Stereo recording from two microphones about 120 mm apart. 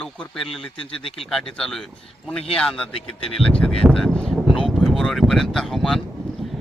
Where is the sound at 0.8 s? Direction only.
50° left (ahead or behind).